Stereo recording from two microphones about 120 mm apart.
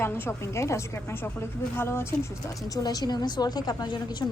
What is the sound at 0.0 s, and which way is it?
A woman's voice, 20° left (ahead or behind).